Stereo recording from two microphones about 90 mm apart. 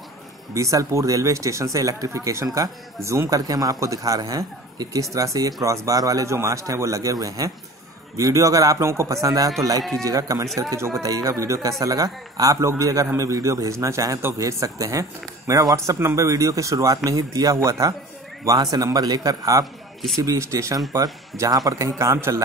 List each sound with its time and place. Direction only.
0.6 s a man's voice: 35° right (ahead or behind)
19.6 s a sound: centre (ahead or behind)
20.2 s a man's voice: 35° right (ahead or behind)